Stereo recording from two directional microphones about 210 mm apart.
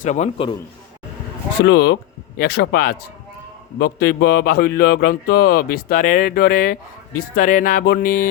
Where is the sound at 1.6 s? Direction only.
55° left (ahead or behind).